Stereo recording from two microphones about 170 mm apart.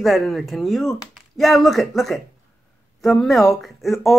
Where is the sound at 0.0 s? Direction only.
Centre (ahead or behind).